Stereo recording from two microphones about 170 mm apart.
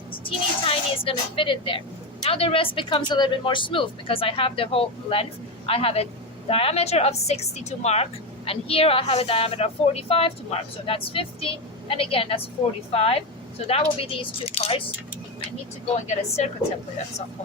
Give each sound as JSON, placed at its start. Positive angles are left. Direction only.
{"t": 0.1, "sound": "a sound", "side_deg": 30}
{"t": 2.2, "sound": "a woman's voice", "side_deg": 35}
{"t": 16.0, "sound": "a woman's voice", "side_deg": 40}